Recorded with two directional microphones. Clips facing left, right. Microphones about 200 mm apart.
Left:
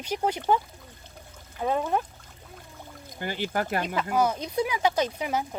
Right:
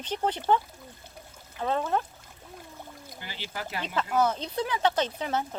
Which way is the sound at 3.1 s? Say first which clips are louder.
Left 10 dB; 50° left (ahead or behind).